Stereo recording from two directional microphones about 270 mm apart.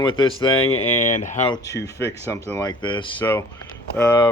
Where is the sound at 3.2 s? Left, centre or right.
Centre.